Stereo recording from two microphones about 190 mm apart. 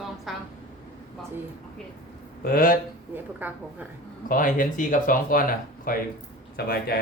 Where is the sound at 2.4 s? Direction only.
50° left (ahead or behind).